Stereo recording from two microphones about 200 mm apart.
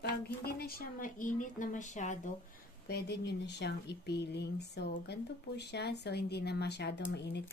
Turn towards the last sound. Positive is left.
turn(degrees=60)  # may be behind; listen again after turning